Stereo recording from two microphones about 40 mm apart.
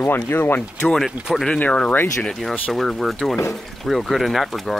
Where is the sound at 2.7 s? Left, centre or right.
Centre.